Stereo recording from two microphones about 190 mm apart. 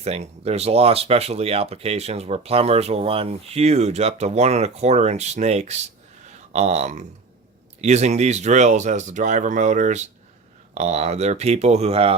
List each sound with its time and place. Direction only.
0.0 s speech: 35° right (ahead or behind)